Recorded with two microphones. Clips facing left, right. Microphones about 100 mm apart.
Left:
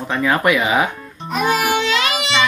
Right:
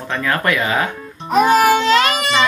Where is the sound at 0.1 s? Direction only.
15° left (ahead or behind).